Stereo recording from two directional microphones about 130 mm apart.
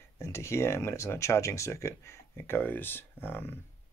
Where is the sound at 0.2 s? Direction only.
20° left (ahead or behind).